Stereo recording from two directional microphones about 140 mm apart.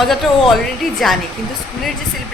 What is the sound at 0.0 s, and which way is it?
Speech, centre (ahead or behind).